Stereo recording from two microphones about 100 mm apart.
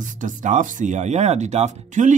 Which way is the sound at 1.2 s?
90° right.